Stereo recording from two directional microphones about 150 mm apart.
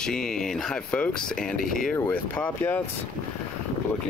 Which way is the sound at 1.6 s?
65° left (ahead or behind).